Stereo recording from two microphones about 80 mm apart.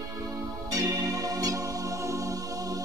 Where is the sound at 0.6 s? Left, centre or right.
Right.